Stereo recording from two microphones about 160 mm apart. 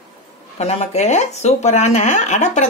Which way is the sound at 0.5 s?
40° left (ahead or behind).